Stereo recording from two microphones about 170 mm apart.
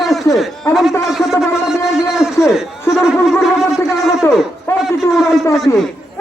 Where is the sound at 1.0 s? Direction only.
Centre (ahead or behind).